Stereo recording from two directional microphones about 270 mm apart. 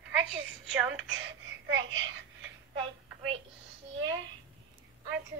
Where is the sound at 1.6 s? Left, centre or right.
Right.